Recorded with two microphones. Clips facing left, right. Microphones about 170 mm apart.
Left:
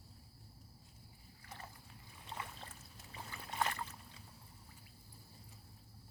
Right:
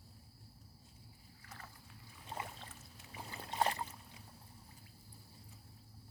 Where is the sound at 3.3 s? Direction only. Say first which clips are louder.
Right 3 dB; 30° right (ahead or behind).